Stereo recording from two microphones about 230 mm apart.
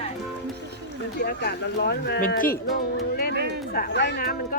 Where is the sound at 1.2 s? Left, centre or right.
Left.